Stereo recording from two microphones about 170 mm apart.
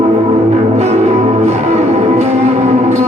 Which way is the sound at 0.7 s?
40° right (ahead or behind).